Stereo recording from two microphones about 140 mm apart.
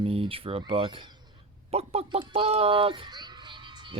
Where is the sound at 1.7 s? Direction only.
45° right (ahead or behind).